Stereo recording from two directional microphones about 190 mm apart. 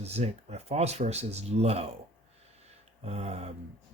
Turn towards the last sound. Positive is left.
turn(degrees=-35)  # may be behind; listen again after turning